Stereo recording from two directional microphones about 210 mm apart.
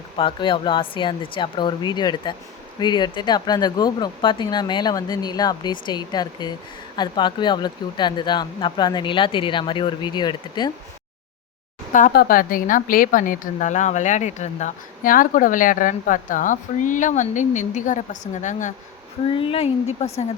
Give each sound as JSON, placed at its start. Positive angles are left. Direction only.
{"t": 0.2, "sound": "speech", "side_deg": 25}
{"t": 11.9, "sound": "speech", "side_deg": 40}